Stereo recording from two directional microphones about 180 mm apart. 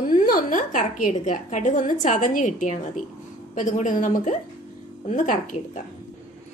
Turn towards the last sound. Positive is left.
turn(degrees=45)  # may be behind; listen again after turning